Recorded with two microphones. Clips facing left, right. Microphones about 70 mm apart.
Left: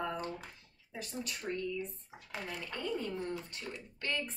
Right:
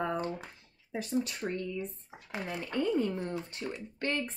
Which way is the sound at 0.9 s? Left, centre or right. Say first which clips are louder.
Right 9 dB; right.